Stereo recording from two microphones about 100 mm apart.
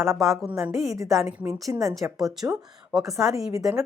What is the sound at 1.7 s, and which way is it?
Speech, 35° right (ahead or behind).